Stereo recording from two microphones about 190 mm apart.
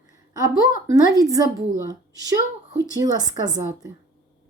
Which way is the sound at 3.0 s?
20° right (ahead or behind).